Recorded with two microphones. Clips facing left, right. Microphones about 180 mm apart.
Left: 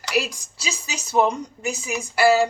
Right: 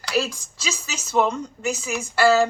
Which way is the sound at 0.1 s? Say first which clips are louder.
Even; 15° left (ahead or behind).